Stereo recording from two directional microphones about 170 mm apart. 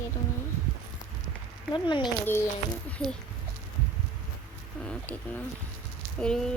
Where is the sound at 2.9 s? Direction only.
5° left (ahead or behind).